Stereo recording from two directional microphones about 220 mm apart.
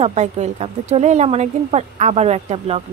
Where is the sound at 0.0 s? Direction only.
30° right (ahead or behind).